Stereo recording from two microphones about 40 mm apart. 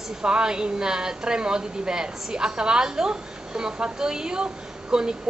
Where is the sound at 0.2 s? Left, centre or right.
Right.